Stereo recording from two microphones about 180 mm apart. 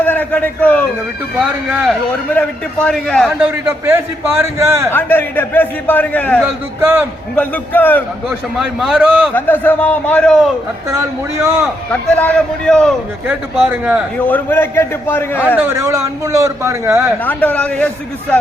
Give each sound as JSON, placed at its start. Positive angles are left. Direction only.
{"t": 0.0, "sound": "a sound", "side_deg": 10}
{"t": 1.4, "sound": "a man's voice", "side_deg": -5}
{"t": 3.2, "sound": "a man's voice", "side_deg": -10}
{"t": 4.9, "sound": "a man's voice", "side_deg": 10}
{"t": 6.4, "sound": "a man's voice", "side_deg": -15}
{"t": 7.3, "sound": "a man's voice", "side_deg": 10}
{"t": 8.5, "sound": "a man's voice", "side_deg": 0}
{"t": 9.3, "sound": "a man's voice", "side_deg": 10}
{"t": 11.6, "sound": "a man's voice", "side_deg": 5}
{"t": 13.2, "sound": "a man's voice", "side_deg": -10}
{"t": 14.3, "sound": "a man's voice", "side_deg": 10}
{"t": 15.5, "sound": "a man's voice", "side_deg": -15}
{"t": 17.2, "sound": "a man's voice", "side_deg": 10}